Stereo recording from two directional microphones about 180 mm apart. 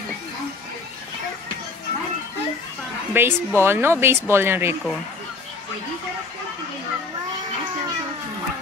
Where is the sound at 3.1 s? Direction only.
15° right (ahead or behind).